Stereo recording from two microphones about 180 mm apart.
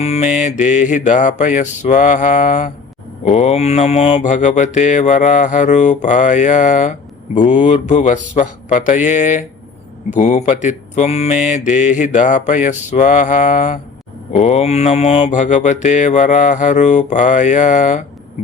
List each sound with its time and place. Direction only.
0.0 s mantra: 35° left (ahead or behind)